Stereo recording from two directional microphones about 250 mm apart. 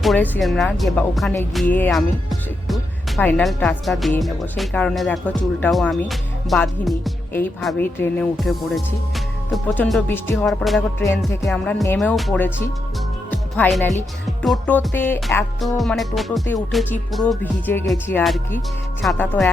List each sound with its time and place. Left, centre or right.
0.0 s speech: centre
13.3 s music: centre
14.3 s speech: centre
19.0 s music: centre